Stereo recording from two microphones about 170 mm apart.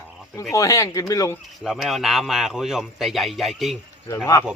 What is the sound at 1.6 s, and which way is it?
A man's voice, centre (ahead or behind).